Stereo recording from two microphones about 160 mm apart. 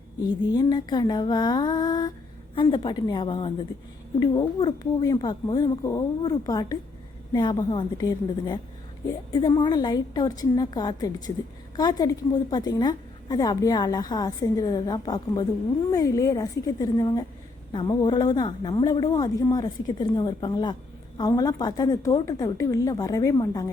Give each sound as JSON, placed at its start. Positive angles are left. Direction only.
{"t": 0.2, "sound": "a woman's voice", "side_deg": 25}